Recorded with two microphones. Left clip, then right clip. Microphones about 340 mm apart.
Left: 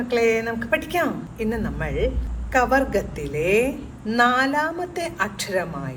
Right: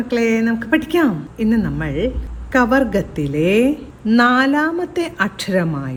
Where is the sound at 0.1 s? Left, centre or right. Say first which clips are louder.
Right 2 dB; right.